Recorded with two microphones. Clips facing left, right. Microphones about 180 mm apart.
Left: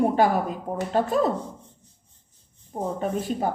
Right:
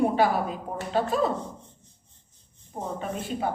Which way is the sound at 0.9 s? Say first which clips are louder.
Left 2 dB; 45° left (ahead or behind).